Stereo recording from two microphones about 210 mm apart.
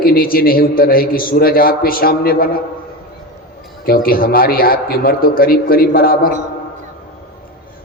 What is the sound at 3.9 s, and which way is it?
A man's voice, 45° left (ahead or behind).